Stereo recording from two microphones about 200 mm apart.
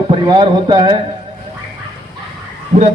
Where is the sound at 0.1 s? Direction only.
25° right (ahead or behind).